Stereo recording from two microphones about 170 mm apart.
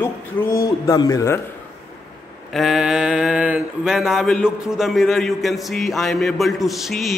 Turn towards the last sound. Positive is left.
turn(degrees=0)  # may be behind; listen again after turning